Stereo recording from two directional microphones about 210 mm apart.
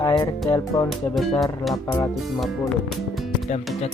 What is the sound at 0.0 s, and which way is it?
Music, 15° left (ahead or behind).